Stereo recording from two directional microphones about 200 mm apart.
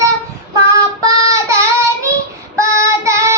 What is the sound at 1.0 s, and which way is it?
Child singing, 15° right (ahead or behind).